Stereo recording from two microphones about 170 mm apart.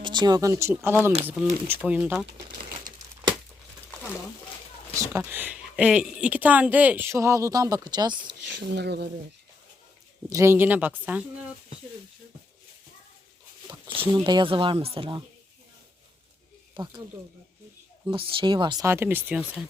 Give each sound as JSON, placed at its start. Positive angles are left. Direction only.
{"t": 0.0, "sound": "speech", "side_deg": -25}
{"t": 4.9, "sound": "speech", "side_deg": -10}
{"t": 8.4, "sound": "speech", "side_deg": -80}
{"t": 10.2, "sound": "speech", "side_deg": -15}
{"t": 14.0, "sound": "speech", "side_deg": -25}
{"t": 16.7, "sound": "speech", "side_deg": -25}
{"t": 18.1, "sound": "speech", "side_deg": -30}
{"t": 18.9, "sound": "speech", "side_deg": -15}